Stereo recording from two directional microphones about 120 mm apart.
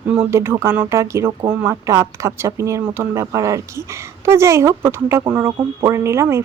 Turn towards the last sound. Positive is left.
turn(degrees=-25)  # may be behind; listen again after turning